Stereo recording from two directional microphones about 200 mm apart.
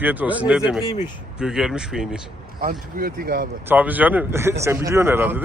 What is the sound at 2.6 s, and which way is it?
Speech, 45° right (ahead or behind).